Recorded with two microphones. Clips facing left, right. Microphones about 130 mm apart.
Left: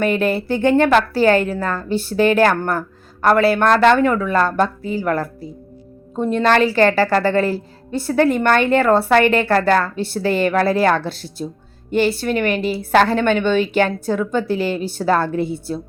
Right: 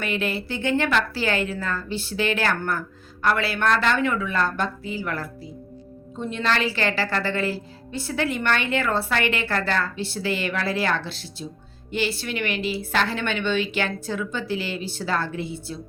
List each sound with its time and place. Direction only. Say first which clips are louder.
0.0 s a woman's voice: left 9 dB; 50° left (ahead or behind)